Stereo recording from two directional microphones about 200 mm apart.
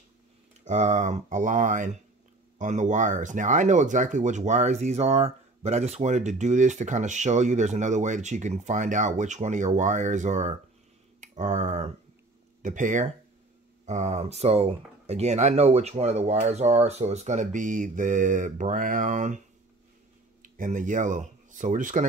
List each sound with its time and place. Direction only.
0.7 s speech: 35° right (ahead or behind)
20.4 s speech: 40° right (ahead or behind)